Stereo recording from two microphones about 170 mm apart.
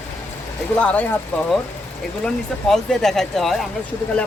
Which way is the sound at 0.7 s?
10° left (ahead or behind).